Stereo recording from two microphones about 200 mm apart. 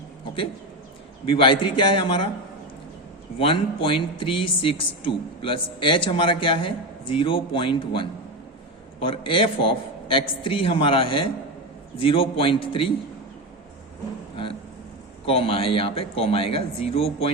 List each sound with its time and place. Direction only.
1.4 s speech: 25° left (ahead or behind)
3.3 s speech: 25° left (ahead or behind)
15.3 s speech: 25° left (ahead or behind)